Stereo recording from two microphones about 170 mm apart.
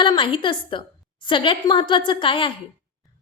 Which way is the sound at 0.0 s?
30° left (ahead or behind).